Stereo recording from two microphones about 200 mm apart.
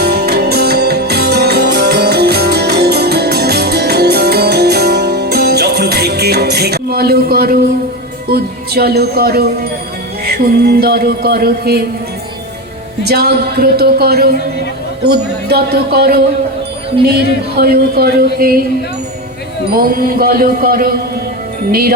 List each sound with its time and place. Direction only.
0.0 s music: 55° right (ahead or behind)
13.1 s music: 55° right (ahead or behind)
19.7 s music: 50° right (ahead or behind)